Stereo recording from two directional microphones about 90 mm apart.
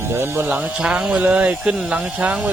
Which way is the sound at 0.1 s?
25° right (ahead or behind).